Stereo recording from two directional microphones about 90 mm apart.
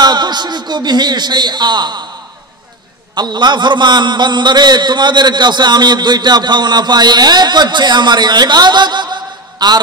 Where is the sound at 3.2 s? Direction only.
55° right (ahead or behind).